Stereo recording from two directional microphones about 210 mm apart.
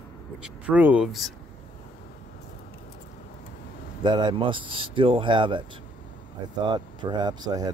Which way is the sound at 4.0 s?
20° right (ahead or behind).